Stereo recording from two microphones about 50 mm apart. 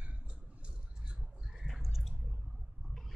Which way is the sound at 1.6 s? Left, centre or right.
Centre.